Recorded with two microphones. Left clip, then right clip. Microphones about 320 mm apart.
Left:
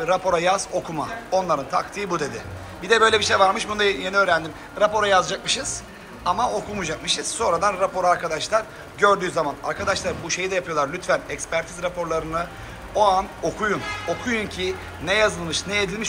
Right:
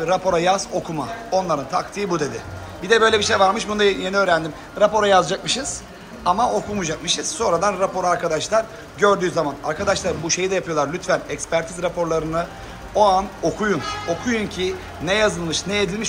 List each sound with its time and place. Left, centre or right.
0.0 s a man's voice: centre